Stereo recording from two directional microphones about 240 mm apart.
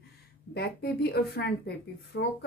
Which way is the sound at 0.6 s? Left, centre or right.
Left.